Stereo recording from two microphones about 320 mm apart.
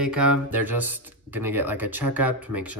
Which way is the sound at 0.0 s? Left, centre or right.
Centre.